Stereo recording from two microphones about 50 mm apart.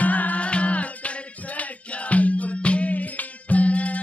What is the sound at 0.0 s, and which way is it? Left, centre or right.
Music, left.